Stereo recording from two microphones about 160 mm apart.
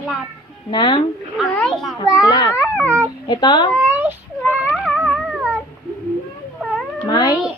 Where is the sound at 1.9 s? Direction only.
25° left (ahead or behind).